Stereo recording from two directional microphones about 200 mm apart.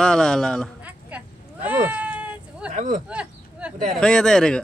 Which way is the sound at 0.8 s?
10° right (ahead or behind).